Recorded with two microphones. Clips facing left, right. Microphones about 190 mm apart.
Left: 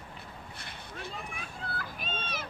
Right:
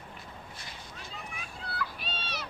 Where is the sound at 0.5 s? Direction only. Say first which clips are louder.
Left 3 dB; 60° left (ahead or behind).